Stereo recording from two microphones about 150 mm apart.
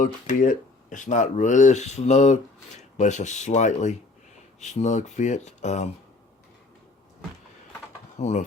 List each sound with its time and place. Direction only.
0.0 s speech: 60° left (ahead or behind)
8.2 s speech: 50° left (ahead or behind)